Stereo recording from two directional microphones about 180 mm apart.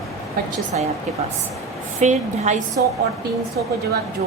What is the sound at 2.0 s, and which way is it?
Speech, 40° right (ahead or behind).